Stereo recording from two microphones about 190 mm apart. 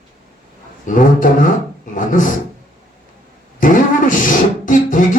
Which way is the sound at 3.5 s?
45° left (ahead or behind).